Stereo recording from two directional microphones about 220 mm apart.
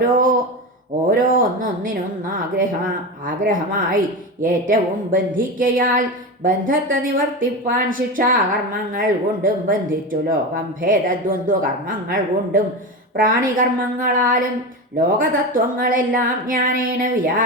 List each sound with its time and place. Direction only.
0.0 s speech: 40° right (ahead or behind)